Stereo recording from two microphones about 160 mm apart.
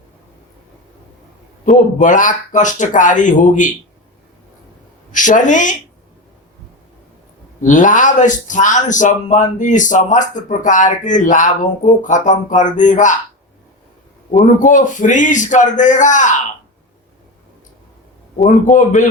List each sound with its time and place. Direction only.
1.6 s speech: 50° left (ahead or behind)
5.1 s speech: 55° left (ahead or behind)
7.6 s speech: 55° left (ahead or behind)
14.3 s speech: 50° left (ahead or behind)
18.3 s speech: 50° left (ahead or behind)